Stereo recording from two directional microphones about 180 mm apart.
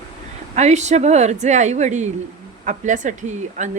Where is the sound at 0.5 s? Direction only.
40° right (ahead or behind).